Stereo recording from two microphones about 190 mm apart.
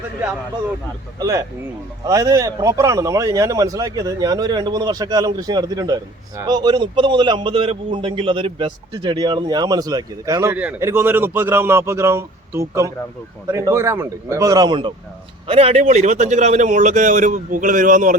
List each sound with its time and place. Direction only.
1.2 s a man's voice: 15° right (ahead or behind); by 18.2 s 45° right (ahead or behind)